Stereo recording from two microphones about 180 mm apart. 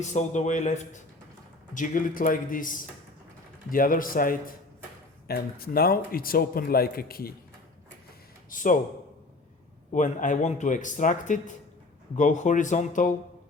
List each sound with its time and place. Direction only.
0.0 s speech: 40° left (ahead or behind); by 7.3 s 55° left (ahead or behind)
8.4 s speech: 45° left (ahead or behind)
9.9 s speech: 45° left (ahead or behind)